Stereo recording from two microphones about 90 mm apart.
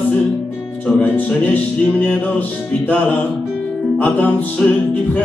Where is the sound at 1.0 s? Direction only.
15° left (ahead or behind).